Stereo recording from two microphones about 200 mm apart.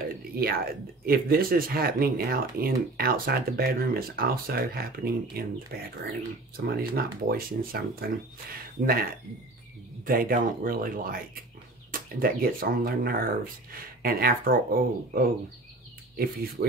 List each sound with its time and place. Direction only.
0.4 s speech: 50° right (ahead or behind)
10.0 s speech: 45° right (ahead or behind)
16.6 s speech: 50° right (ahead or behind)